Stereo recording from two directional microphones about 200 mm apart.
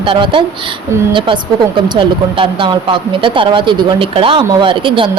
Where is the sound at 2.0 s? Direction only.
25° right (ahead or behind).